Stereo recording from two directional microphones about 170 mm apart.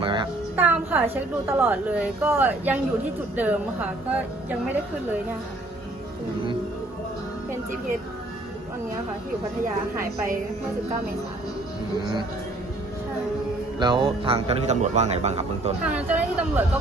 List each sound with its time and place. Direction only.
0.0 s music: 30° right (ahead or behind)
0.5 s a woman's voice: 10° right (ahead or behind)
9.9 s a woman's voice: 15° right (ahead or behind)
13.7 s speech: 25° right (ahead or behind)
15.8 s a woman's voice: 10° right (ahead or behind)